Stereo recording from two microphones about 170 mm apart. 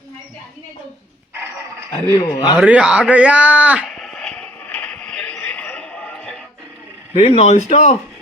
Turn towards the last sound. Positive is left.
turn(degrees=45)  # may be behind; listen again after turning